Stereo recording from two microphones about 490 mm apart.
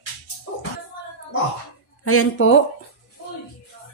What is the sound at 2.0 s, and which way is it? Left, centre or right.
Speech, left.